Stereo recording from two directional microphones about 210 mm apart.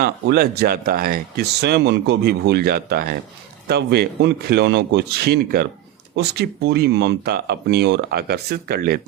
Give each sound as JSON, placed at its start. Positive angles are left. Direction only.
{"t": 0.0, "sound": "speech", "side_deg": -50}